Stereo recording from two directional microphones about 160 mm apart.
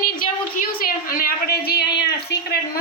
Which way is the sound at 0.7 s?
65° left (ahead or behind).